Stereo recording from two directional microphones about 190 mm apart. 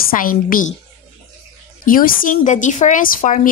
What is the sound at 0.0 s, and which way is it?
Speech, 45° left (ahead or behind).